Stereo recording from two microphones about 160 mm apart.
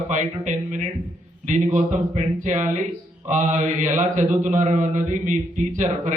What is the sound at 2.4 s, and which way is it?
A man's voice, 50° right (ahead or behind).